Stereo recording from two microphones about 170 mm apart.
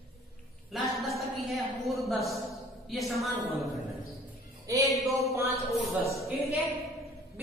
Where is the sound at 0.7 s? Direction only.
Centre (ahead or behind).